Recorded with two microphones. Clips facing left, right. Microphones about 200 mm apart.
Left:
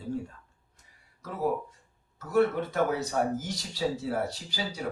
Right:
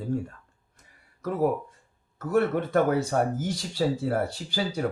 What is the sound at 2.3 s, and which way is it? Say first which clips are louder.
Speech: right 2 dB; 55° right (ahead or behind).